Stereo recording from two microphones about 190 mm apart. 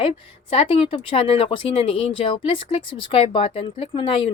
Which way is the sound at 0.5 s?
30° left (ahead or behind).